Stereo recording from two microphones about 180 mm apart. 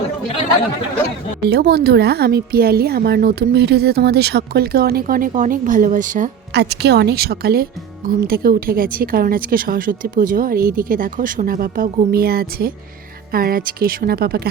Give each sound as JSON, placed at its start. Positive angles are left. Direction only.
{"t": 1.5, "sound": "a woman's voice", "side_deg": -65}
{"t": 6.5, "sound": "a woman's voice", "side_deg": -65}